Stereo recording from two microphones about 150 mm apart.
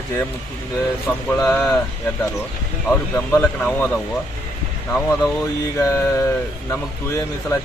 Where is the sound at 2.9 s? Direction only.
10° left (ahead or behind).